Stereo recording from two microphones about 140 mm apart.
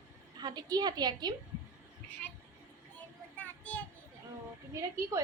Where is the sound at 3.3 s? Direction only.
10° left (ahead or behind).